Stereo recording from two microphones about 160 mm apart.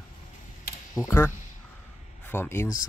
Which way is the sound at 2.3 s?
15° left (ahead or behind).